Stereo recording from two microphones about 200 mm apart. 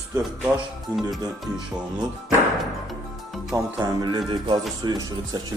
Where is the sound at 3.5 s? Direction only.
20° right (ahead or behind).